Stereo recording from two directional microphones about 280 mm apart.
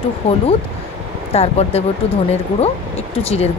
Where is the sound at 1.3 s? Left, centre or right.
Left.